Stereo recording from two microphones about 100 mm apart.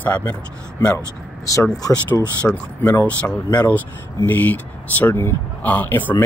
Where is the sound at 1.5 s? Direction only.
35° left (ahead or behind).